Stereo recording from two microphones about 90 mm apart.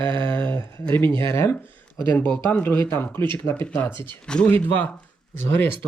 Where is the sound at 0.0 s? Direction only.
60° right (ahead or behind).